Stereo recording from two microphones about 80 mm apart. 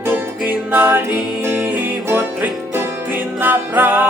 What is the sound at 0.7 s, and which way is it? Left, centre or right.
Music, right.